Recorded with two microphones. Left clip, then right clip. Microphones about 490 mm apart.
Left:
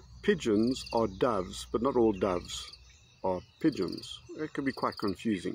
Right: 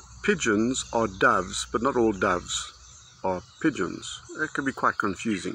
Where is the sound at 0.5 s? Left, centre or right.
Left.